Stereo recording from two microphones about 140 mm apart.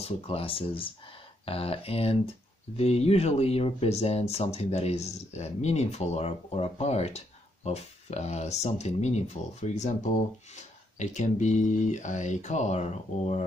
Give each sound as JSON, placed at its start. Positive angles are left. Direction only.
{"t": 0.0, "sound": "speech", "side_deg": 40}